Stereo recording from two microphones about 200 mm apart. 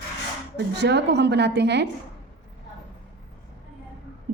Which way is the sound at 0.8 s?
55° right (ahead or behind).